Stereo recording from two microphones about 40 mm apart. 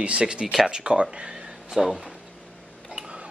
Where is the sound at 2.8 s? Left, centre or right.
Centre.